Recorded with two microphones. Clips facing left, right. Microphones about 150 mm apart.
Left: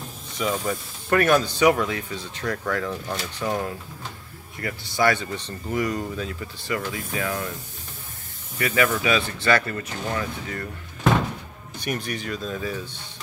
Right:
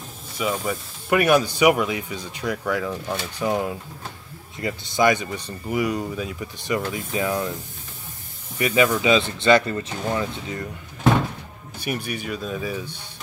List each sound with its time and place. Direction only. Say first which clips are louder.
0.4 s speech: even; 5° right (ahead or behind)
8.5 s speech: right 3 dB; 20° right (ahead or behind)
11.8 s speech: right 1 dB; 10° right (ahead or behind)